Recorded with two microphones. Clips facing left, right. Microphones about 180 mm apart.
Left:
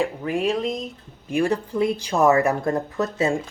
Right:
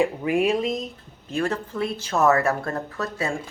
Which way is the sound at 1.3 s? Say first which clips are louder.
Left 4 dB; 15° left (ahead or behind).